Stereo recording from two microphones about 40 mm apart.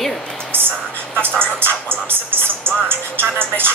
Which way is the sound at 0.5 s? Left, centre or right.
Right.